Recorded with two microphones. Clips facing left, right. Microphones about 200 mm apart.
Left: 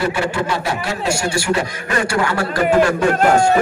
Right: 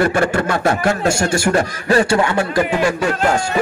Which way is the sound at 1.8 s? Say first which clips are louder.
Right 5 dB; 30° right (ahead or behind).